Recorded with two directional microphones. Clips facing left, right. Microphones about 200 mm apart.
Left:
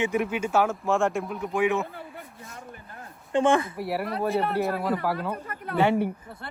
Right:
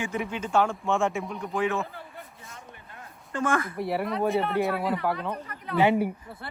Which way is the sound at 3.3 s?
25° left (ahead or behind).